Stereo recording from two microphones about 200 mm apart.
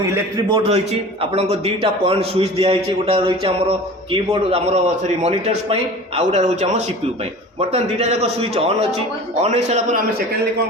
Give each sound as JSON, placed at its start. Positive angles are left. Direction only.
{"t": 0.1, "sound": "a man's voice", "side_deg": -20}